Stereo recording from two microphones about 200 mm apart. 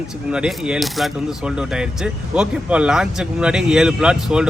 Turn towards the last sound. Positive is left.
turn(degrees=-5)  # may be behind; listen again after turning